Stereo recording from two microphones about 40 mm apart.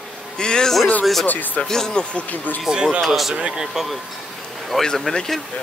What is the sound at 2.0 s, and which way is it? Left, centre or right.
Speech, left.